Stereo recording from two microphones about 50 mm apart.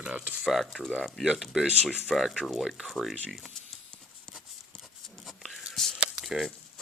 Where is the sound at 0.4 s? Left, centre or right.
Centre.